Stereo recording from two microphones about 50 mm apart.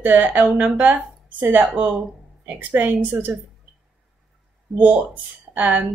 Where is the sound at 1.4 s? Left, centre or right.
Right.